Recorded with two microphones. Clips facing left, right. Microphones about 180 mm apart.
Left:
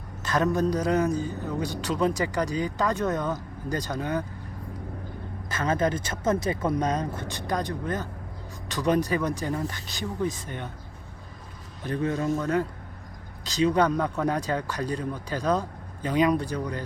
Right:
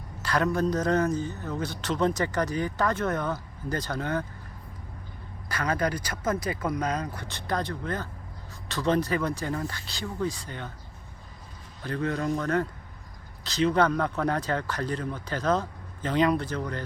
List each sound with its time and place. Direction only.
0.2 s a man's voice: 20° left (ahead or behind)
5.5 s speech: 20° left (ahead or behind)
7.3 s a man's voice: 15° left (ahead or behind)
11.8 s a man's voice: 20° left (ahead or behind)